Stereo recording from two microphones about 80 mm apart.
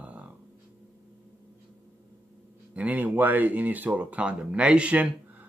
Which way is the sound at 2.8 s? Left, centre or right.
Centre.